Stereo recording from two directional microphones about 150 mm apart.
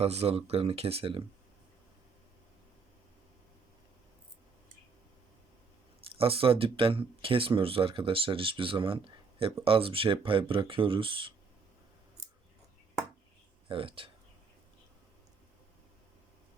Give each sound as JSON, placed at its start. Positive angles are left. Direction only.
{"t": 0.0, "sound": "speech", "side_deg": -45}
{"t": 6.1, "sound": "speech", "side_deg": -40}
{"t": 13.7, "sound": "speech", "side_deg": -35}